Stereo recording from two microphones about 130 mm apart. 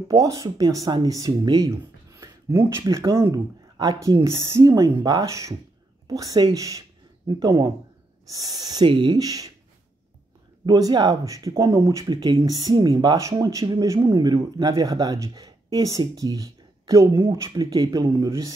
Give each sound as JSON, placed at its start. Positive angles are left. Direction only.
{"t": 0.1, "sound": "speech", "side_deg": -25}
{"t": 10.6, "sound": "speech", "side_deg": -30}